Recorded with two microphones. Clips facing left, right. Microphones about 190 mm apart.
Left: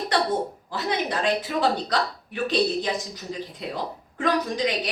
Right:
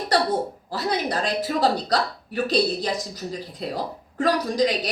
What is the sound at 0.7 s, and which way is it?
A woman's voice, 40° right (ahead or behind).